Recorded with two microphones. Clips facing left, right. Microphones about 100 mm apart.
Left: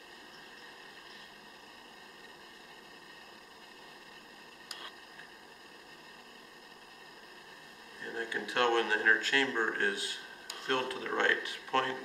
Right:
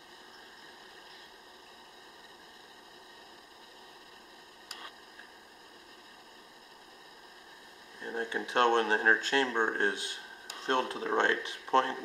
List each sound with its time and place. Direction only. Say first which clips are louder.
8.0 s speech: right 3 dB; 25° right (ahead or behind)